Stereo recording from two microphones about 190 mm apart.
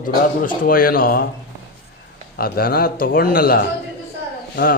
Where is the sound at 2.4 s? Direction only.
50° left (ahead or behind).